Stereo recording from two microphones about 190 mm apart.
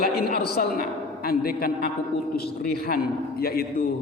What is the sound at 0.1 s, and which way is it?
A man's voice, 55° left (ahead or behind).